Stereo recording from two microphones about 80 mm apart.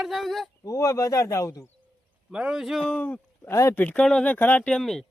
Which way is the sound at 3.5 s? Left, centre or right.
Left.